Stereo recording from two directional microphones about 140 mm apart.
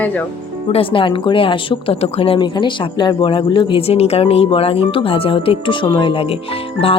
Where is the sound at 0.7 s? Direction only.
40° left (ahead or behind).